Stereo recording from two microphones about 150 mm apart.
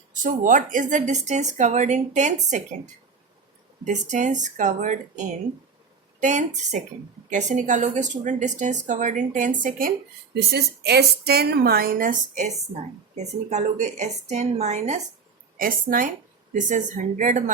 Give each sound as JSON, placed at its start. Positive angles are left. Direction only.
{"t": 0.1, "sound": "speech", "side_deg": -60}
{"t": 3.8, "sound": "speech", "side_deg": -55}
{"t": 10.3, "sound": "a woman's voice", "side_deg": -90}
{"t": 15.5, "sound": "speech", "side_deg": -70}